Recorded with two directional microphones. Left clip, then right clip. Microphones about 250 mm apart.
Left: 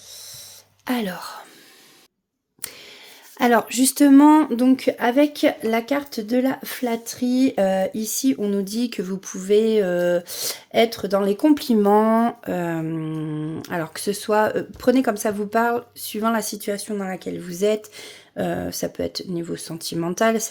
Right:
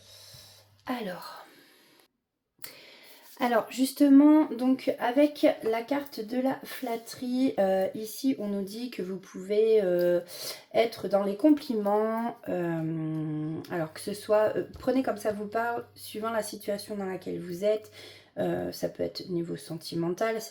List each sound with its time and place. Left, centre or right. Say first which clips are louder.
0.9 s speech: left 8 dB; left
3.3 s speech: left 8 dB; left